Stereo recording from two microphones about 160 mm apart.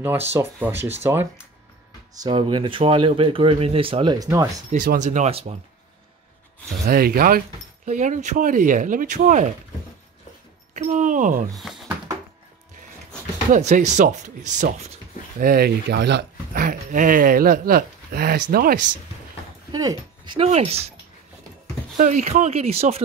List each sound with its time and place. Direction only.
0.0 s speech: 15° right (ahead or behind)
2.2 s speech: 30° right (ahead or behind)
4.6 s speech: 55° right (ahead or behind)
6.8 s speech: 70° right (ahead or behind)
7.8 s speech: 50° right (ahead or behind)
10.7 s speech: 50° right (ahead or behind)
11.5 s speech: centre (ahead or behind)
13.5 s speech: 50° right (ahead or behind)
15.3 s speech: 75° right (ahead or behind)
19.7 s speech: 25° right (ahead or behind)
20.3 s speech: 40° right (ahead or behind)
21.9 s speech: 55° right (ahead or behind)